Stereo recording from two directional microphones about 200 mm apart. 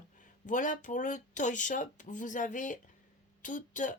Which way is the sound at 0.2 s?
40° left (ahead or behind).